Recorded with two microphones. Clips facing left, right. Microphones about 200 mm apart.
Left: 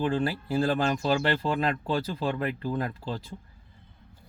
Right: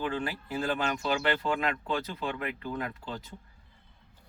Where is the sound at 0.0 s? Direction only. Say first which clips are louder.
Left 6 dB; 35° left (ahead or behind).